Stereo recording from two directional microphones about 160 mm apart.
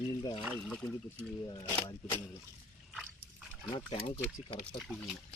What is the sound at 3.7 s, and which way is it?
Speech, 30° left (ahead or behind).